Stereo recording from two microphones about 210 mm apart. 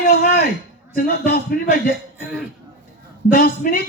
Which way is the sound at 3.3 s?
40° left (ahead or behind).